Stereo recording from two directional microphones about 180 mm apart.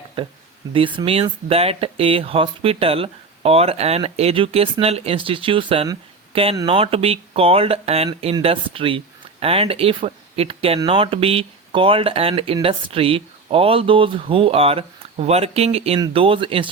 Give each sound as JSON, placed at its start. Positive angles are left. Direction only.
{"t": 0.2, "sound": "speech", "side_deg": -30}